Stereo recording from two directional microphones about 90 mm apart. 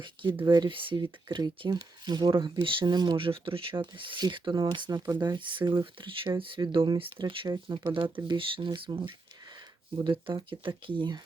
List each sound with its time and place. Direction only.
0.0 s speech: 60° right (ahead or behind)
0.7 s speech: 70° right (ahead or behind); by 3.2 s 50° right (ahead or behind)
3.2 s speech: 85° right; by 7.0 s 55° right (ahead or behind)
7.4 s speech: 45° right (ahead or behind)
8.3 s speech: 70° right (ahead or behind)